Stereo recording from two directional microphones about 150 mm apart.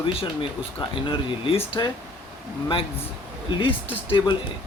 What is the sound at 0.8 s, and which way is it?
Speech, 35° left (ahead or behind).